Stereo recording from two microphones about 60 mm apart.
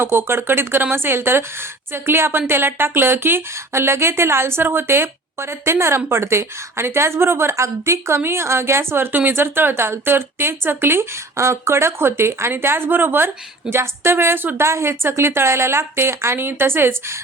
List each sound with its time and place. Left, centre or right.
0.0 s a woman's voice: right